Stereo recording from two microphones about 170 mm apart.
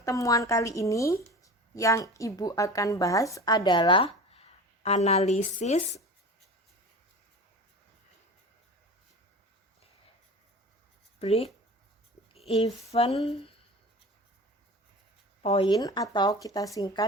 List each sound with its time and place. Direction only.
0.0 s speech: 20° left (ahead or behind); by 6.0 s 45° left (ahead or behind)
11.2 s speech: 35° left (ahead or behind)
12.3 s a sound: 35° left (ahead or behind)
12.9 s speech: 40° left (ahead or behind)
15.4 s speech: 35° left (ahead or behind)
15.7 s speech: 20° left (ahead or behind)